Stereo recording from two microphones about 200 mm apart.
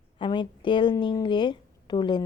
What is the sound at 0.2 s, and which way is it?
A woman's voice, 25° left (ahead or behind).